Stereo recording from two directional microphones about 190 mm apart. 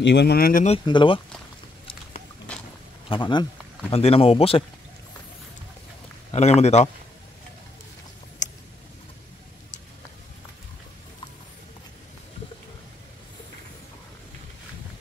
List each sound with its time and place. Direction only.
0.0 s speech: 65° left (ahead or behind)
0.8 s speech: 25° left (ahead or behind)
2.5 s a sound: 5° left (ahead or behind)
3.1 s speech: 25° left (ahead or behind)
6.3 s speech: 35° left (ahead or behind)